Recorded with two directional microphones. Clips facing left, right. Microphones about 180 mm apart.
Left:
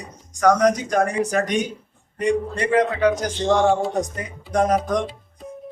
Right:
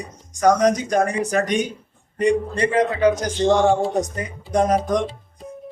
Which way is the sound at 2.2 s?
20° right (ahead or behind).